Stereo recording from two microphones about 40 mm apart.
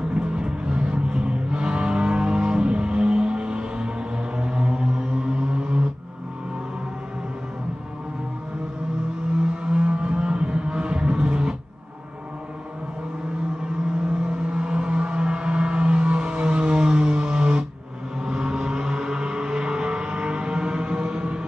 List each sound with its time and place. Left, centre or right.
0.1 s vehicle: right
4.4 s a sound: right
9.6 s vehicle: right
14.2 s music: right
18.2 s vehicle: centre